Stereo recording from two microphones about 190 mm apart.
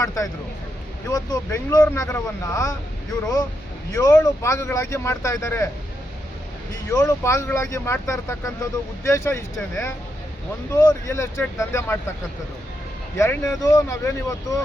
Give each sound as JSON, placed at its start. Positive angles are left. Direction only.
{"t": 0.0, "sound": "speech", "side_deg": 15}
{"t": 3.9, "sound": "speech", "side_deg": 15}
{"t": 6.9, "sound": "speech", "side_deg": 15}
{"t": 13.1, "sound": "speech", "side_deg": 15}